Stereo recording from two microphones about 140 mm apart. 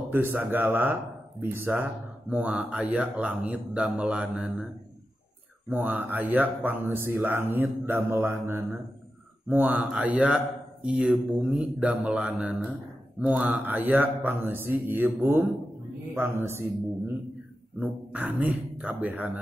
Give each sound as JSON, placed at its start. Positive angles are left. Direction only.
{"t": 0.1, "sound": "speech", "side_deg": -15}
{"t": 5.7, "sound": "speech", "side_deg": -10}